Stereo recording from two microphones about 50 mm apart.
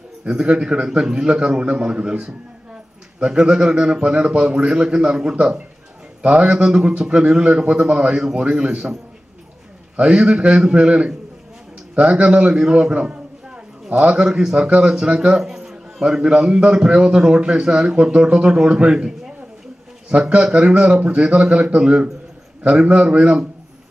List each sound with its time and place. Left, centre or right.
0.2 s a man's voice: centre
9.9 s a man's voice: centre